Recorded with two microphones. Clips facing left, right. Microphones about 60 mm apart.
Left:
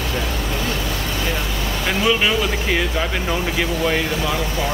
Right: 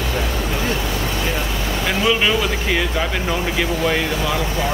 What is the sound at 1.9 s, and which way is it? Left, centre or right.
Speech, centre.